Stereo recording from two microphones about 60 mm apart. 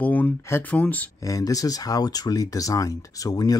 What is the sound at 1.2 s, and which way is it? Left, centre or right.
Speech, left.